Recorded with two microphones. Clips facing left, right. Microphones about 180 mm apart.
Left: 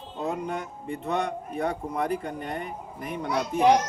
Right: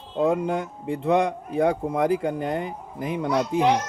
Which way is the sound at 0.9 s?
90° right.